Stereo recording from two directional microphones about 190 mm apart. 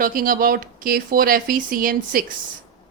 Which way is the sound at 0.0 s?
50° right (ahead or behind).